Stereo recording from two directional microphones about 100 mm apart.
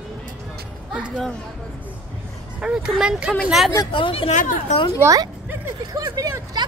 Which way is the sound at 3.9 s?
65° left (ahead or behind).